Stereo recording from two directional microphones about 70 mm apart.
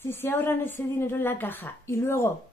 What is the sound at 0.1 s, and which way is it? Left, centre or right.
A woman's voice, left.